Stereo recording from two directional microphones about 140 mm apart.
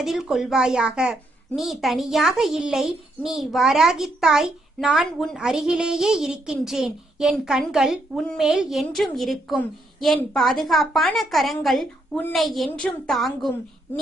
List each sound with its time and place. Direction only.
0.0 s a woman's voice: centre (ahead or behind)